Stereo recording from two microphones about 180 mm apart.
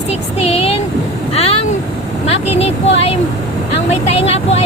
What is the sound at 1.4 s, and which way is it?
Vehicle, 35° left (ahead or behind).